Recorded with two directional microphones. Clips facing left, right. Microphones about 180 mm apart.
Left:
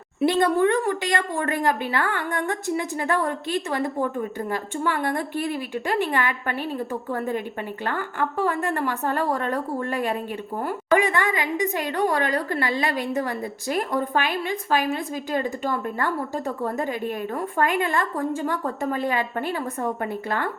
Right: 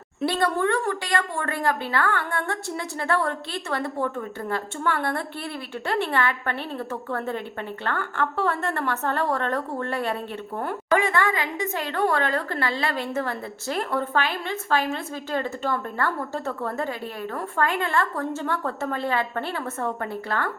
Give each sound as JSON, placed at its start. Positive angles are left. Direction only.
{"t": 0.2, "sound": "speech", "side_deg": 15}